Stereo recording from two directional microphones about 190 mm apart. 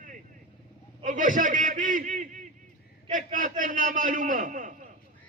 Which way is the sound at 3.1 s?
45° right (ahead or behind).